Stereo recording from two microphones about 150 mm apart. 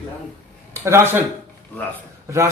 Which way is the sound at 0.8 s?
15° right (ahead or behind).